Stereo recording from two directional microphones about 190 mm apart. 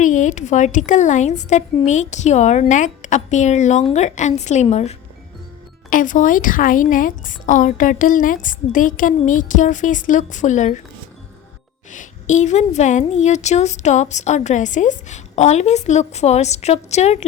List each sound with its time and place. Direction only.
0.0 s a woman's voice: 40° left (ahead or behind)
11.9 s a woman's voice: 40° left (ahead or behind)